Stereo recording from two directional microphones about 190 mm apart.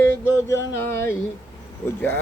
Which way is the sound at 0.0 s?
15° left (ahead or behind).